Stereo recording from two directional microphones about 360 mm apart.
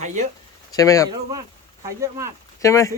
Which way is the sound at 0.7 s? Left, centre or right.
Centre.